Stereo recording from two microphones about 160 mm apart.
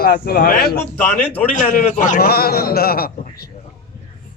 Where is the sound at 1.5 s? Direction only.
50° left (ahead or behind); by 3.1 s 70° left (ahead or behind).